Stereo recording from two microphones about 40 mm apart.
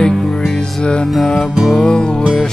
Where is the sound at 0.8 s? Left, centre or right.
Left.